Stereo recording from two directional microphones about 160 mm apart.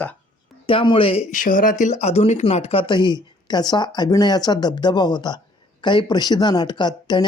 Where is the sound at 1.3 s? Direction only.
60° left (ahead or behind).